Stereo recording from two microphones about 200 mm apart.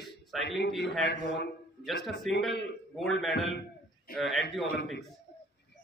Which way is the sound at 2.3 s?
Centre (ahead or behind).